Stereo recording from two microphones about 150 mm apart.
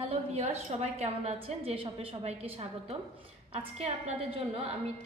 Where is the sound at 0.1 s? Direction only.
45° right (ahead or behind).